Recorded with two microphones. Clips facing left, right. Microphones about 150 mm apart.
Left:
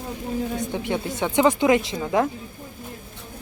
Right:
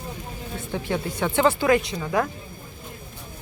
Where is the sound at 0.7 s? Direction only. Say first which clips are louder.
Left 1 dB; 20° left (ahead or behind).